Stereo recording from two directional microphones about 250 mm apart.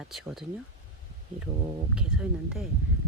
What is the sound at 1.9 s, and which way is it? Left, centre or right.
Speech, centre.